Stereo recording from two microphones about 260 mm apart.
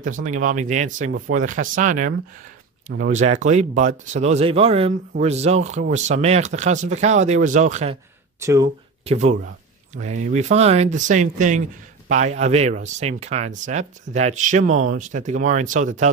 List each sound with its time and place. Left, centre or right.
0.2 s speech: right
8.4 s speech: centre
9.0 s speech: right